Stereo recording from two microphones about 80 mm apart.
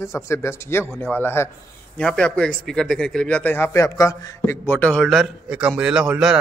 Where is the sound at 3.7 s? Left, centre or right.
Left.